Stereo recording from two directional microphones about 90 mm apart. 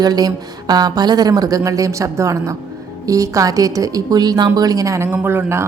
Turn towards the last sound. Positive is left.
turn(degrees=-25)  # may be behind; listen again after turning